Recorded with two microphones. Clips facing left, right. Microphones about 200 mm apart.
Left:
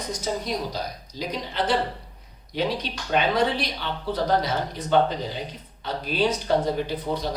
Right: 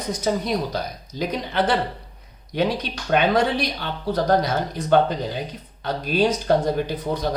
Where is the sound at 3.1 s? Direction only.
50° right (ahead or behind).